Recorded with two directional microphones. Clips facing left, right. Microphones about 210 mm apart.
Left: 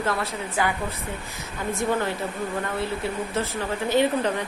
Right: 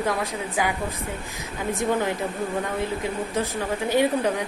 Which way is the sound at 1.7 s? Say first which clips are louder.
Right 1 dB; 15° right (ahead or behind).